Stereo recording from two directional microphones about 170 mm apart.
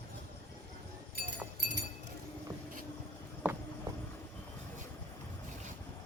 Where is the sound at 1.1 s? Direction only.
65° right (ahead or behind).